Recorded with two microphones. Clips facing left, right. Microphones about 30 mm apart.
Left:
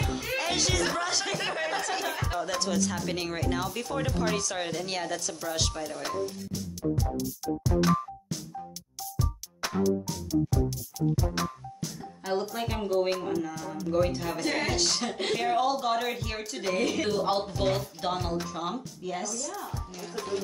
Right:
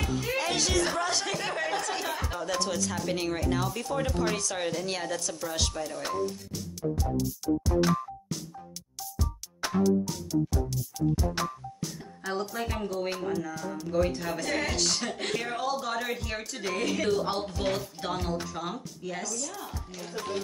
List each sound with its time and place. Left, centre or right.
0.2 s music: centre
2.4 s speech: centre
9.1 s music: centre
12.3 s a woman's voice: centre
14.4 s a woman's voice: centre